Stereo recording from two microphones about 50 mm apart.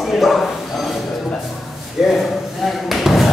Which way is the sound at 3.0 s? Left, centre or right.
Centre.